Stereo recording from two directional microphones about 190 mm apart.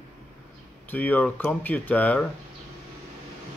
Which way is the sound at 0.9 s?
10° left (ahead or behind).